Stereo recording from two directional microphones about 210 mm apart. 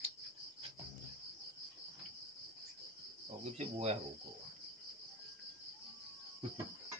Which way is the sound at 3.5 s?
30° right (ahead or behind).